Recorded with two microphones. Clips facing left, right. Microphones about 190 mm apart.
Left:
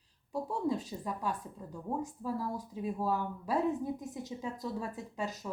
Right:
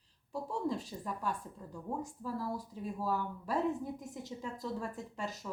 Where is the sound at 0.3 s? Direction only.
15° left (ahead or behind).